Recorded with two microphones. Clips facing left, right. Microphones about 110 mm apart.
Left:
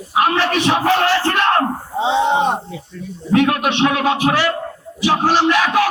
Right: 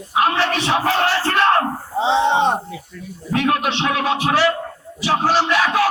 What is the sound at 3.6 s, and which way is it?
Speech, 20° left (ahead or behind).